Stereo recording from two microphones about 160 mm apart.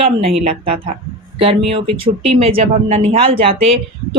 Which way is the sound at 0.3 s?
35° right (ahead or behind).